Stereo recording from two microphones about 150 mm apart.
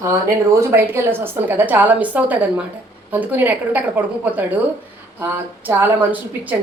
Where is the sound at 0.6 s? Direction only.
15° right (ahead or behind).